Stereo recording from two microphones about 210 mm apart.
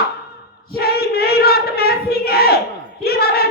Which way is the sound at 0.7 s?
45° left (ahead or behind).